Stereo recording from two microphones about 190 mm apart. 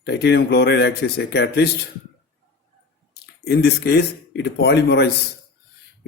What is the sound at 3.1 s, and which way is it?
Speech, 60° left (ahead or behind).